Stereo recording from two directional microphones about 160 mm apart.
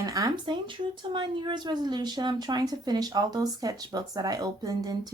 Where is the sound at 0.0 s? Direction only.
25° right (ahead or behind).